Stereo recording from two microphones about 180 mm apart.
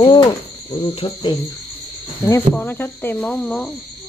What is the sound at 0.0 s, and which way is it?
Cricket, 25° left (ahead or behind).